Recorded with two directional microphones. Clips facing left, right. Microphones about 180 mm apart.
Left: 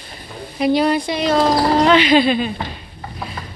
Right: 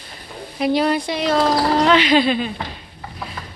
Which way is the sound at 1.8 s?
5° left (ahead or behind).